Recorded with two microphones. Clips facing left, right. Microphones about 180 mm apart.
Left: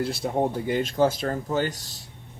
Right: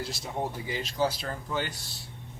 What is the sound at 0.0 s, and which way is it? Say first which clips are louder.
Speech: left 8 dB; 60° left (ahead or behind).